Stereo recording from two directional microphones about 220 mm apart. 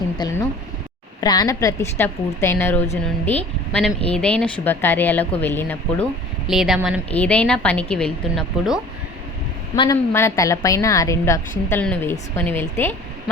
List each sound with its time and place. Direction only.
0.2 s a sound: 20° left (ahead or behind)
1.2 s a woman's voice: 15° left (ahead or behind); by 8.8 s centre (ahead or behind)
9.7 s a woman's voice: 20° left (ahead or behind)